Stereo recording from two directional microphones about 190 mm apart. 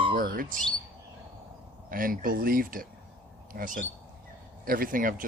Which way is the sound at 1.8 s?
50° right (ahead or behind).